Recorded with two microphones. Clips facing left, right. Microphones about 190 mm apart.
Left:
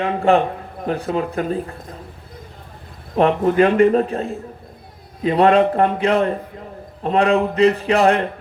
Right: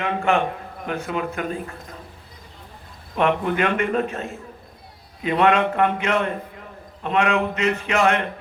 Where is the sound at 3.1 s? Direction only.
35° left (ahead or behind).